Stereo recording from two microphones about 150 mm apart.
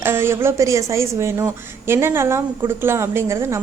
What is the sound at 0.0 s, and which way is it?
A woman's voice, 15° right (ahead or behind).